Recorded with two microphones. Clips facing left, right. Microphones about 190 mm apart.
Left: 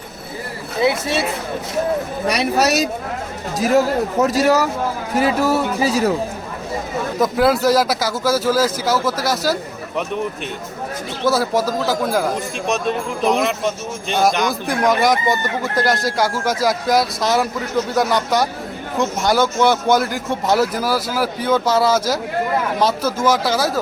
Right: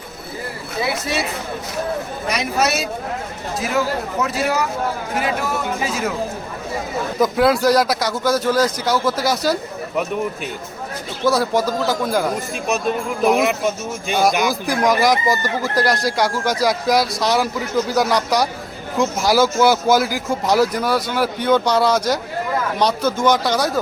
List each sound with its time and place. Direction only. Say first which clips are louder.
2.3 s speech: left 3 dB; 35° left (ahead or behind)
4.2 s speech: left 6 dB; 40° left (ahead or behind)
7.2 s speech: even; centre (ahead or behind)
11.3 s speech: even; centre (ahead or behind)